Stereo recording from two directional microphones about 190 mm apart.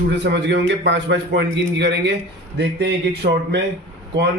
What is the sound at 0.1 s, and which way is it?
A man's voice, 65° right (ahead or behind).